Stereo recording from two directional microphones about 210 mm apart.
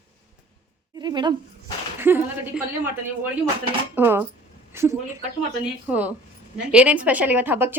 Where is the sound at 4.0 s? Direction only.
10° right (ahead or behind).